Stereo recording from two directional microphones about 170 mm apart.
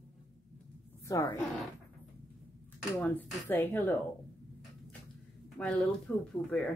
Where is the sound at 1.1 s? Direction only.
15° left (ahead or behind).